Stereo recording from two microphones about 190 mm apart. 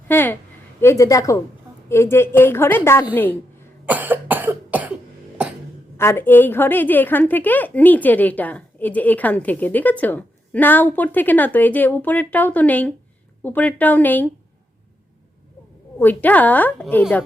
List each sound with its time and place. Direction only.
0.1 s a woman's voice: 10° left (ahead or behind)
3.8 s cough: 10° right (ahead or behind)
6.0 s a woman's voice: 10° left (ahead or behind)
16.0 s a woman's voice: 10° left (ahead or behind)